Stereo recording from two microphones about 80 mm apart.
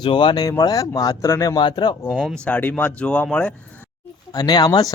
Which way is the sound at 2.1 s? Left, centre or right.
Centre.